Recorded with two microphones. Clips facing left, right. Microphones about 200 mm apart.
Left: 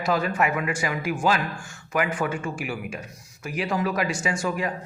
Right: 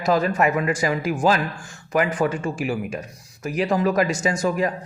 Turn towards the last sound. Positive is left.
turn(degrees=-40)  # may be behind; listen again after turning